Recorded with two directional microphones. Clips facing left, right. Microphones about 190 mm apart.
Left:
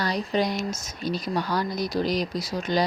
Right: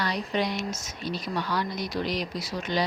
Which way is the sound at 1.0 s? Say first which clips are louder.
Left 4 dB; 40° left (ahead or behind).